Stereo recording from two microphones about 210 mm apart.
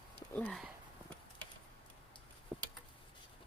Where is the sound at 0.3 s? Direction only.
5° left (ahead or behind).